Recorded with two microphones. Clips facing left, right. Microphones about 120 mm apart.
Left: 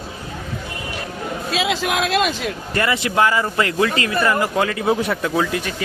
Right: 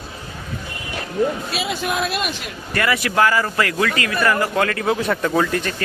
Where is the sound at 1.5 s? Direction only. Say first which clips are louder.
Left 3 dB; 90° left.